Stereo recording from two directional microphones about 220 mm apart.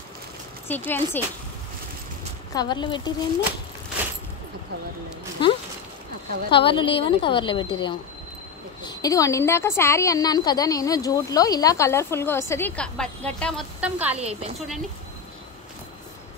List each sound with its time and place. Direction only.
0.7 s a woman's voice: 10° left (ahead or behind)
2.5 s speech: 20° left (ahead or behind)
5.4 s a woman's voice: 20° left (ahead or behind); by 14.2 s 5° right (ahead or behind)